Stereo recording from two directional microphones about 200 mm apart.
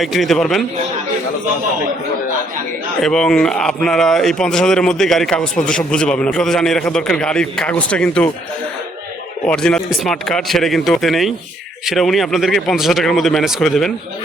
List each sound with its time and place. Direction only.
0.0 s speech: centre (ahead or behind)
3.0 s speech: 5° left (ahead or behind)
9.5 s speech: 5° left (ahead or behind)